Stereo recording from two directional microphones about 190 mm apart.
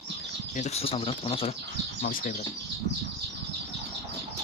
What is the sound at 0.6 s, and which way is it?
Speech, 35° left (ahead or behind).